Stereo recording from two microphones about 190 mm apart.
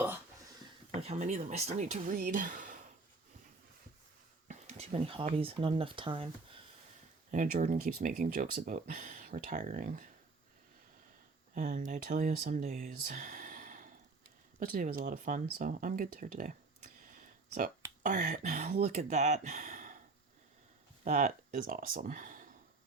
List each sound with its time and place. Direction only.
0.9 s speech: 35° right (ahead or behind)
4.4 s speech: 35° right (ahead or behind)
7.3 s speech: 45° right (ahead or behind)
11.5 s speech: 45° right (ahead or behind)
21.0 s speech: 45° right (ahead or behind)